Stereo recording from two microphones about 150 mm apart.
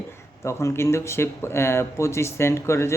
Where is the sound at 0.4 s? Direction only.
20° left (ahead or behind).